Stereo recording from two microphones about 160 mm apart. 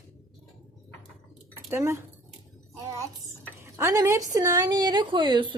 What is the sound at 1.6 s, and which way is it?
Speech, 15° right (ahead or behind).